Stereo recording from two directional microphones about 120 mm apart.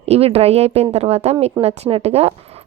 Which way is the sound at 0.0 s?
60° right (ahead or behind).